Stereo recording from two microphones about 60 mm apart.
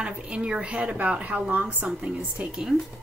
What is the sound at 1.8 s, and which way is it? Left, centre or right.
Speech, centre.